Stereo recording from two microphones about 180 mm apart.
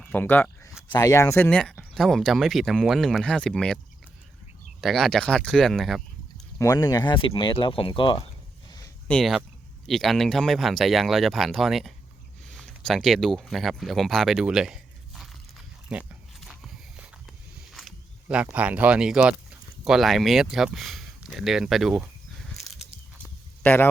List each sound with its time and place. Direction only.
0.0 s a sound: 10° left (ahead or behind)
0.9 s speech: 20° left (ahead or behind); by 3.8 s 5° left (ahead or behind)
4.8 s speech: centre (ahead or behind)
6.6 s speech: 20° left (ahead or behind)
9.0 s speech: centre (ahead or behind)
15.9 s a sound: 5° right (ahead or behind)
17.7 s speech: centre (ahead or behind)
22.4 s a sound: centre (ahead or behind)
23.6 s speech: 10° left (ahead or behind)